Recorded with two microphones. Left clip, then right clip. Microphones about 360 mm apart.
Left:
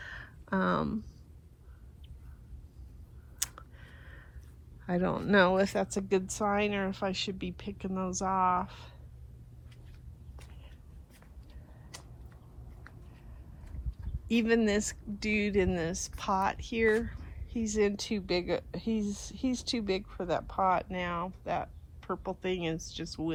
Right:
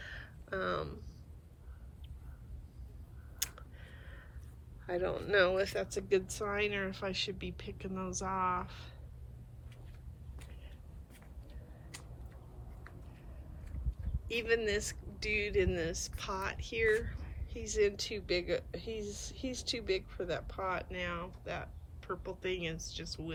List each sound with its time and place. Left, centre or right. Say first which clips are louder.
0.0 s a sound: left 3 dB; centre
3.3 s clicking: left 3 dB; centre
4.9 s speech: left 4 dB; centre
14.3 s speech: left 4 dB; centre